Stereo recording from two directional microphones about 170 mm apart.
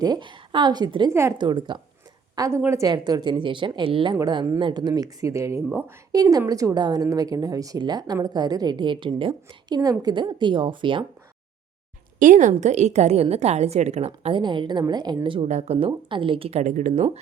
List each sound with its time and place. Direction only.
0.0 s a woman's voice: 25° right (ahead or behind)
12.2 s a woman's voice: 50° right (ahead or behind)
14.3 s speech: 30° right (ahead or behind)
15.4 s a woman's voice: 40° right (ahead or behind)